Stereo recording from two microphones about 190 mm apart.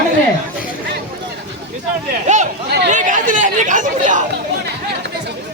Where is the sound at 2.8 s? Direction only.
40° right (ahead or behind).